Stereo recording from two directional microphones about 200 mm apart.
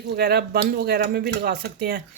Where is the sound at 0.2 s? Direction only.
50° right (ahead or behind).